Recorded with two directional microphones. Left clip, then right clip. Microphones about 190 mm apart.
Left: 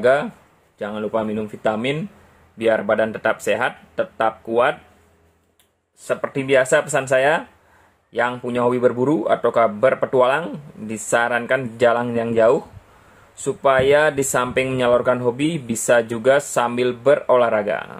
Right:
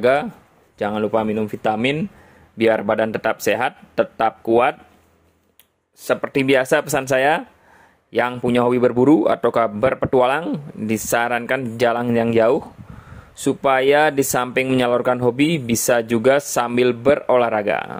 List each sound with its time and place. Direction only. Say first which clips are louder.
0.0 s speech: even; 45° right (ahead or behind)
6.0 s speech: right 3 dB; 50° right (ahead or behind)